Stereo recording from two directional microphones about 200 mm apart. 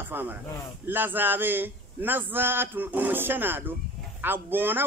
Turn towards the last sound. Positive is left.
turn(degrees=-10)  # may be behind; listen again after turning